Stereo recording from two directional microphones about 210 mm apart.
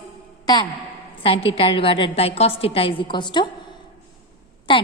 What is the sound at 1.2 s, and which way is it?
A woman's voice, 25° left (ahead or behind).